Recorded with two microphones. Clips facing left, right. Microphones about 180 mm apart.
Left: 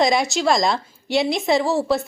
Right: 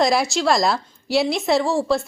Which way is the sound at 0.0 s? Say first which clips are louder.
Even; centre (ahead or behind).